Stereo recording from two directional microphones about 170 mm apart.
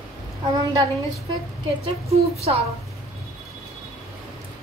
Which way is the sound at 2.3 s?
35° right (ahead or behind).